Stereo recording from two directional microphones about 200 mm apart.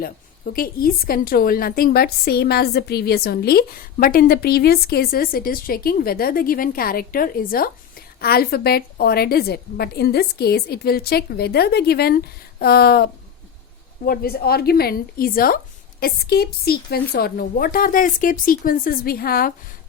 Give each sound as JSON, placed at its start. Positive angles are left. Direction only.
{"t": 0.0, "sound": "a woman's voice", "side_deg": 45}